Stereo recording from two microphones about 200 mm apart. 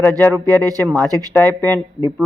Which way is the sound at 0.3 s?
20° right (ahead or behind).